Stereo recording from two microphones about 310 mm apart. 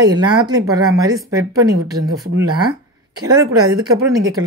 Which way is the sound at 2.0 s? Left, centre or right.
Right.